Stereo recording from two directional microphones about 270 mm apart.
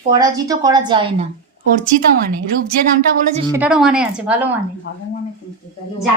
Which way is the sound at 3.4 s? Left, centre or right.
Centre.